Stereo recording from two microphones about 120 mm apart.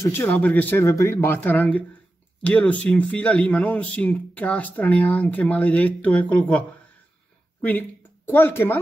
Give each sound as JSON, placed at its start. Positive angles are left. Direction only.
{"t": 0.0, "sound": "speech", "side_deg": 15}
{"t": 8.3, "sound": "speech", "side_deg": 20}